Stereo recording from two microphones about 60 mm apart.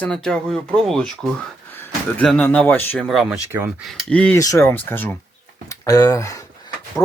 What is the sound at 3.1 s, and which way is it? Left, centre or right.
Speech, centre.